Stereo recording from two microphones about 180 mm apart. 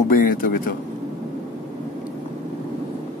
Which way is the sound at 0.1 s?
50° left (ahead or behind).